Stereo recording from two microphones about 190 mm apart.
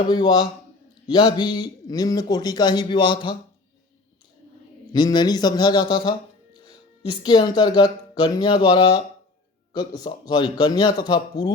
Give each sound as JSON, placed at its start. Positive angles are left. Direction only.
{"t": 0.1, "sound": "a man's voice", "side_deg": 20}
{"t": 4.9, "sound": "a man's voice", "side_deg": 20}